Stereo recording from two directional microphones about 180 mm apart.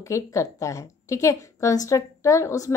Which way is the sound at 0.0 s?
15° left (ahead or behind).